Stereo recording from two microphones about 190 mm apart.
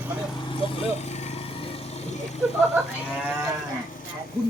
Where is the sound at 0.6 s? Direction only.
30° left (ahead or behind).